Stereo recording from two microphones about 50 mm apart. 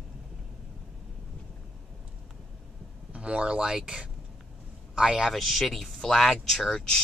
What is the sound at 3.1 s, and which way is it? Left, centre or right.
A man's voice, centre.